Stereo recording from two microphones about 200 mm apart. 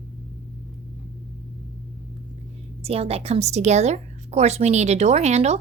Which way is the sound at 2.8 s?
30° right (ahead or behind).